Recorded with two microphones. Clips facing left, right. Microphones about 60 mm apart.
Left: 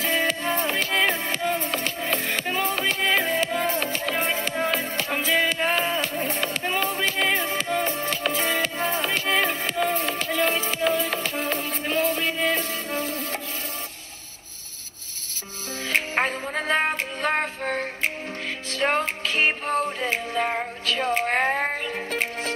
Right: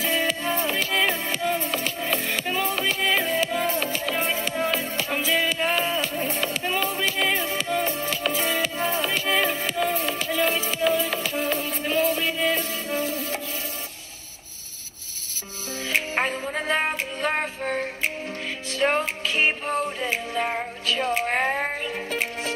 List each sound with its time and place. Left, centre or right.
0.0 s music: left
15.9 s music: left